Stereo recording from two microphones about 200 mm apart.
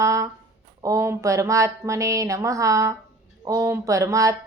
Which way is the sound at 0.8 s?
15° right (ahead or behind).